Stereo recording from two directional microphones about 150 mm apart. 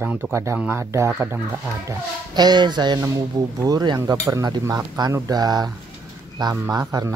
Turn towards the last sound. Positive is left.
turn(degrees=-25)  # may be behind; listen again after turning